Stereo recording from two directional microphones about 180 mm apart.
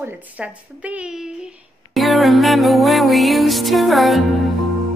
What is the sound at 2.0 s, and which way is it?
Music, centre (ahead or behind).